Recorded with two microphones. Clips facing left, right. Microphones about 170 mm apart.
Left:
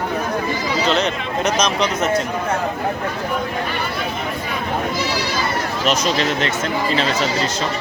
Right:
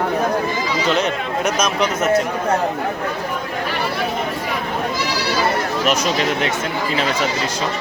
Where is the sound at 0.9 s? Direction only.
10° right (ahead or behind).